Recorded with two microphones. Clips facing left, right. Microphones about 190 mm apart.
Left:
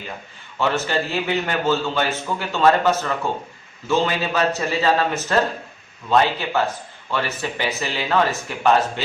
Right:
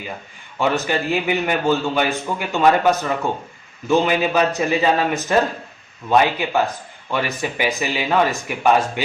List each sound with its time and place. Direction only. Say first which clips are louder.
0.6 s a man's voice: right 2 dB; 15° right (ahead or behind)